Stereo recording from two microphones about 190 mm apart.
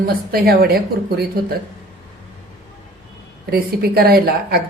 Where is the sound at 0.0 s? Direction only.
55° right (ahead or behind).